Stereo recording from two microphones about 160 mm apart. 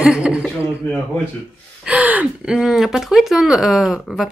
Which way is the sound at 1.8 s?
10° right (ahead or behind).